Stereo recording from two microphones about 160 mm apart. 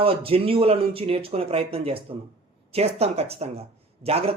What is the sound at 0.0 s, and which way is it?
Speech, 35° right (ahead or behind).